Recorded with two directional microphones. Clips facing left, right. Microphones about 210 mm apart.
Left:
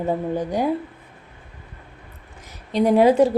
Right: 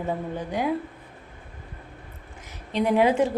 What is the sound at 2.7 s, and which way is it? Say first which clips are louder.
Speech: left 5 dB; 40° left (ahead or behind).